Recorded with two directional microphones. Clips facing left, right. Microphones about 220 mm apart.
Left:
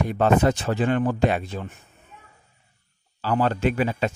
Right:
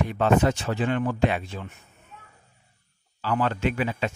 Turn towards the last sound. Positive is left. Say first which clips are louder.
# left 3 dB
turn(degrees=40)  # may be behind; listen again after turning